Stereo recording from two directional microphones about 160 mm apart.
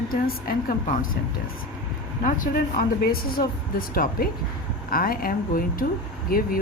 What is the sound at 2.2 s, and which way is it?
Speech, 60° left (ahead or behind).